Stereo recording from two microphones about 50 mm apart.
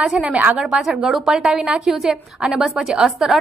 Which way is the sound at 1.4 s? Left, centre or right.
Centre.